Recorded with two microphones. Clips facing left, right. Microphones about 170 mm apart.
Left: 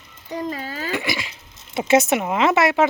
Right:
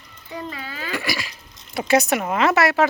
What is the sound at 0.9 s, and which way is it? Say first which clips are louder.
Dog: left 1 dB; 20° left (ahead or behind).